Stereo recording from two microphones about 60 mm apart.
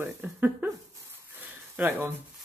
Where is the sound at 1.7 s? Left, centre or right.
Right.